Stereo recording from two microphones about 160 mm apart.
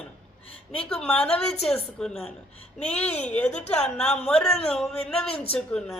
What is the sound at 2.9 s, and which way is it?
A woman's voice, 10° left (ahead or behind).